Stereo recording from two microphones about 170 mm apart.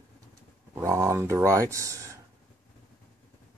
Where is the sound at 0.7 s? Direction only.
15° right (ahead or behind).